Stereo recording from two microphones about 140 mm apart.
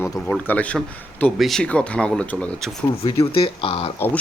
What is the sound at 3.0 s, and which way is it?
Speech, 40° left (ahead or behind).